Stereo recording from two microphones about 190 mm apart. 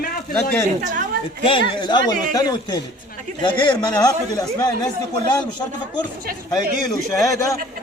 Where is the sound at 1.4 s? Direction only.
25° left (ahead or behind).